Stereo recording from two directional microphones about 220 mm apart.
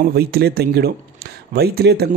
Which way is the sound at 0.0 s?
45° right (ahead or behind).